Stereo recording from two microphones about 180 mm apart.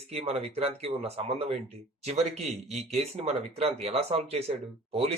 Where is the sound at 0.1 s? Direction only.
35° right (ahead or behind).